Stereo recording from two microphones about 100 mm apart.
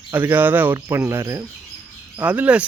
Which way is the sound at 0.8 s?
30° right (ahead or behind).